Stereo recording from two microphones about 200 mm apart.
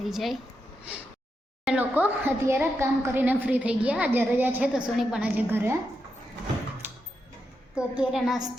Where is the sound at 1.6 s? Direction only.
10° right (ahead or behind).